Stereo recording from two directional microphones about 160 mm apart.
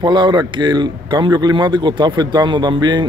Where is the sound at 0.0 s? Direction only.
25° right (ahead or behind).